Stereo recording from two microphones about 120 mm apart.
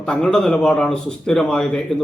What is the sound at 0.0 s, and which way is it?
A man's voice, 5° left (ahead or behind).